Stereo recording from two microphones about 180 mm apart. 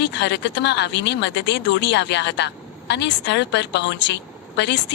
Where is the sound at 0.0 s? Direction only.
75° left (ahead or behind).